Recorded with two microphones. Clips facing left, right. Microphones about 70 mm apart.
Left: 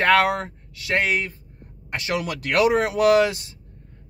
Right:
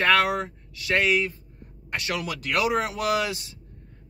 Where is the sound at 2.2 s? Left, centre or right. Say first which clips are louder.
Left 7 dB; left.